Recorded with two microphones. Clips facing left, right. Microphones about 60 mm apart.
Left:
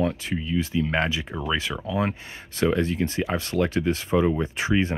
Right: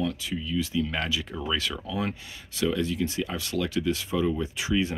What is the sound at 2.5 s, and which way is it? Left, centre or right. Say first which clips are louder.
Speech: left 4 dB; left.